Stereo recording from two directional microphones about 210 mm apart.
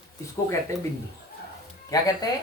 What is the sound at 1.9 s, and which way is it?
Speech, 15° left (ahead or behind).